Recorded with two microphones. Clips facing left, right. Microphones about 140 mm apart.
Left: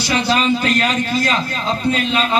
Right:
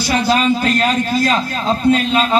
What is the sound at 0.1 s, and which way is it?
A man's voice, 45° right (ahead or behind).